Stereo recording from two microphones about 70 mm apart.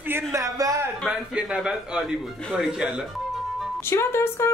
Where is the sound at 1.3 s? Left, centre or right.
Centre.